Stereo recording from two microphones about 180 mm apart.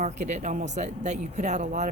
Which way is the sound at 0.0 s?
40° right (ahead or behind).